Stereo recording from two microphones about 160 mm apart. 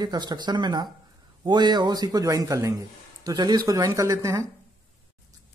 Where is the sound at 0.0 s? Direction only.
25° right (ahead or behind).